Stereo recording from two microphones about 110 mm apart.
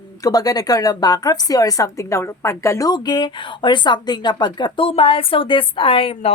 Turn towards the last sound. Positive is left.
turn(degrees=55)  # may be behind; listen again after turning